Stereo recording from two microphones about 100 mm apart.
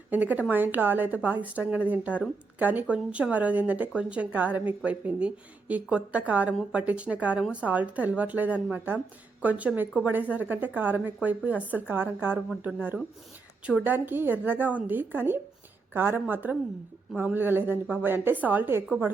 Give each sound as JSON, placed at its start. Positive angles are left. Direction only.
{"t": 0.1, "sound": "a woman's voice", "side_deg": -15}